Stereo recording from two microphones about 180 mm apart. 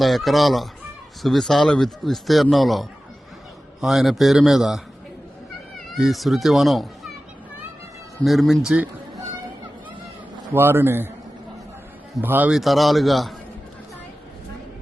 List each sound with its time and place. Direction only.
0.0 s speech: centre (ahead or behind)
6.0 s speech: centre (ahead or behind)
8.2 s speech: centre (ahead or behind)
10.5 s speech: 10° right (ahead or behind)
12.2 s speech: 10° right (ahead or behind)